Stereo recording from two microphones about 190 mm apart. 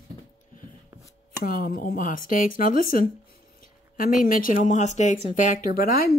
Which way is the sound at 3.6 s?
50° left (ahead or behind).